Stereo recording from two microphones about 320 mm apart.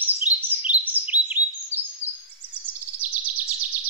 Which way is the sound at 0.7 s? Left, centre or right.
Centre.